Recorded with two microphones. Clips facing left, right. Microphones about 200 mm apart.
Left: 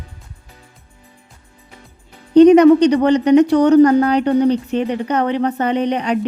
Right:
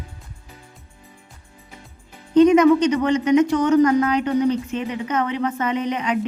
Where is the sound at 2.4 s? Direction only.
35° left (ahead or behind).